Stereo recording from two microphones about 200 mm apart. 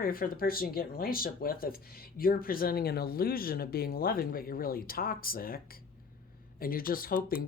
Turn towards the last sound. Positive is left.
turn(degrees=45)  # may be behind; listen again after turning